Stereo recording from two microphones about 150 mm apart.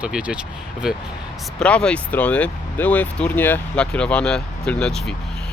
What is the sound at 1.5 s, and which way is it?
Speech, 5° left (ahead or behind).